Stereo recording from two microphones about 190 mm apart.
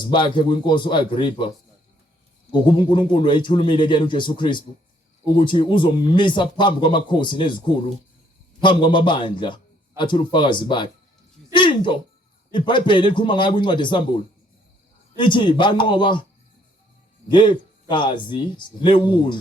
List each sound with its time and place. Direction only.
0.0 s speech: 25° left (ahead or behind)
2.5 s speech: 25° left (ahead or behind)
15.1 s speech: 25° left (ahead or behind)
17.2 s speech: 25° left (ahead or behind)